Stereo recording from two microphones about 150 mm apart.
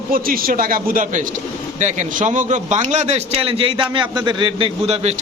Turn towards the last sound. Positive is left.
turn(degrees=-45)  # may be behind; listen again after turning